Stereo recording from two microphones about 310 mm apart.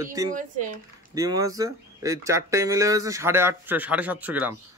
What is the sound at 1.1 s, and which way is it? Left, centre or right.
Speech, centre.